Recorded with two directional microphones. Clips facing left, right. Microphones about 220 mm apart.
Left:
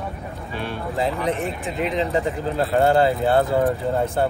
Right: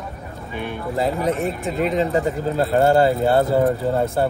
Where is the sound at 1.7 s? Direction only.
45° right (ahead or behind).